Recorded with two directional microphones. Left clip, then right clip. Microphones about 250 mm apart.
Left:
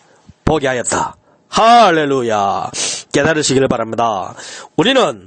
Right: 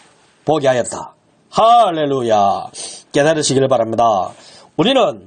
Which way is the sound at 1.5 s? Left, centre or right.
Left.